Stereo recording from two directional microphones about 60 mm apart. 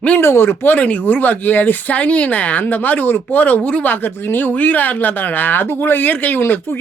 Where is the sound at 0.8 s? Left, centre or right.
Left.